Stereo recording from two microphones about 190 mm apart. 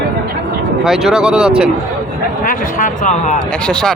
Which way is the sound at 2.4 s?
40° left (ahead or behind).